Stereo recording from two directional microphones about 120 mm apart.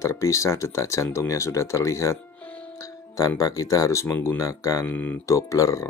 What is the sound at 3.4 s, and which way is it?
Speech, 30° left (ahead or behind).